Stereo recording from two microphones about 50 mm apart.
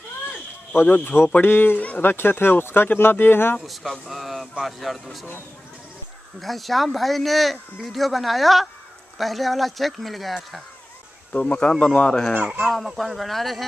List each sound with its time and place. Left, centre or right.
0.8 s speech: left
1.4 s speech: left
3.6 s speech: centre
6.4 s speech: centre
11.3 s speech: left
12.4 s speech: right
12.6 s speech: centre